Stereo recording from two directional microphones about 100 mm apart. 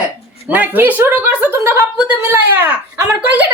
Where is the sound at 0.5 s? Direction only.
15° right (ahead or behind).